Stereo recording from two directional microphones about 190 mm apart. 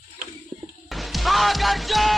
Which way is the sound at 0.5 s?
25° right (ahead or behind).